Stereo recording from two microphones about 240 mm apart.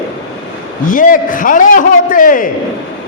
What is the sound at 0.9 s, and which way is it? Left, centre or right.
A man's voice, left.